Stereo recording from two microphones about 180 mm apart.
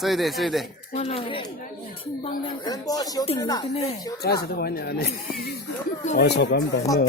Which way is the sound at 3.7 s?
35° left (ahead or behind).